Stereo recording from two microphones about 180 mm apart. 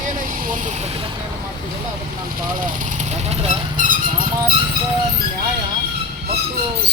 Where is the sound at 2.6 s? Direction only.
45° right (ahead or behind).